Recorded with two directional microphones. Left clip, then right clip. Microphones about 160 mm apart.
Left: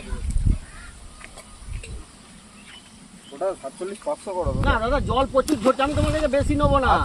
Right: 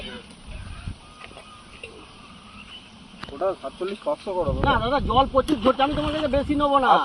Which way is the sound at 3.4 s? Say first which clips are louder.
Right 1 dB; 35° right (ahead or behind).